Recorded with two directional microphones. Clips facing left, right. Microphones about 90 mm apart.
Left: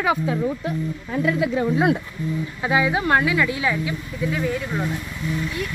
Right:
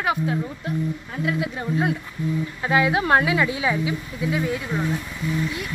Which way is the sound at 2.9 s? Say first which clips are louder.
Right 1 dB; 5° right (ahead or behind).